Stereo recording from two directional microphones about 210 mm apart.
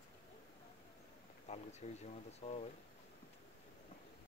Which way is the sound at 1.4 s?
30° left (ahead or behind).